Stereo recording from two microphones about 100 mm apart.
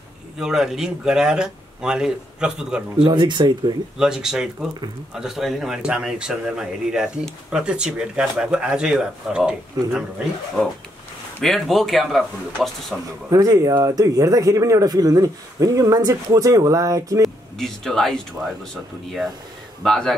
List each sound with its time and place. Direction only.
0.4 s speech: 5° right (ahead or behind)
3.0 s speech: 50° right (ahead or behind)
4.0 s a man's voice: 5° right (ahead or behind)
11.4 s a man's voice: centre (ahead or behind)
13.3 s speech: 35° right (ahead or behind)
17.2 s a man's voice: 5° left (ahead or behind)